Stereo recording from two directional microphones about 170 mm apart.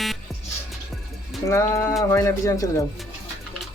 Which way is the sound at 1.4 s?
15° left (ahead or behind).